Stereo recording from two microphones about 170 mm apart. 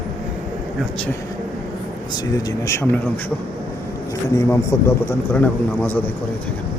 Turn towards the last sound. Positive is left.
turn(degrees=10)  # may be behind; listen again after turning